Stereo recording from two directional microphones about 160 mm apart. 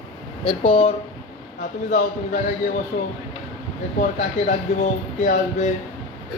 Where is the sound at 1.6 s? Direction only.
50° left (ahead or behind).